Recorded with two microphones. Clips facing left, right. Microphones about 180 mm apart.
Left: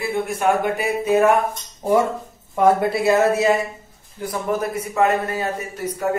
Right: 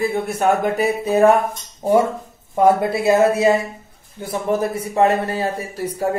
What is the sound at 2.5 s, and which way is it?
A man's voice, 25° right (ahead or behind).